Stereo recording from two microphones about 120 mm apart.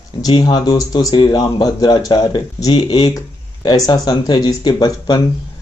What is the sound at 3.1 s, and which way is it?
Speech, 30° left (ahead or behind).